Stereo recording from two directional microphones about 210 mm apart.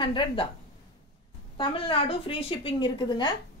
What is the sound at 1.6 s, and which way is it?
Speech, 25° left (ahead or behind).